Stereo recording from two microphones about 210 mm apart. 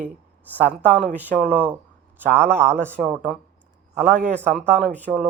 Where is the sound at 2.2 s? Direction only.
10° right (ahead or behind).